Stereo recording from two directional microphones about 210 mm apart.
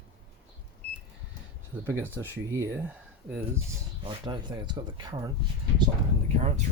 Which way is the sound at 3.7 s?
20° right (ahead or behind).